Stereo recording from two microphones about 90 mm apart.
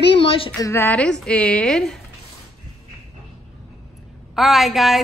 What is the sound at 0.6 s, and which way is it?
Speech, 30° left (ahead or behind).